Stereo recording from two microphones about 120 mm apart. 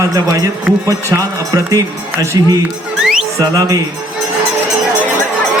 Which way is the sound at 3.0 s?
5° right (ahead or behind).